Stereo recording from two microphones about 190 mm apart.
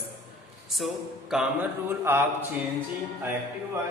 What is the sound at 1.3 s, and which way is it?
Speech, 5° right (ahead or behind).